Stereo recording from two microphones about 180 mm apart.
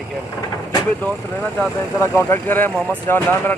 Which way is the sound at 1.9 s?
20° left (ahead or behind).